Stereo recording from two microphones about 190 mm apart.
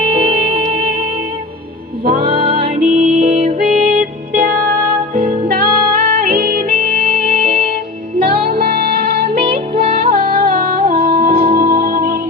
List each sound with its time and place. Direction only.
0.5 s music: 45° right (ahead or behind)
2.0 s music: 40° right (ahead or behind)